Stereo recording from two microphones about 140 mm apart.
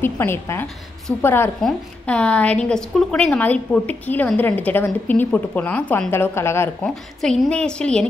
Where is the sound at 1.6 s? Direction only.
5° left (ahead or behind).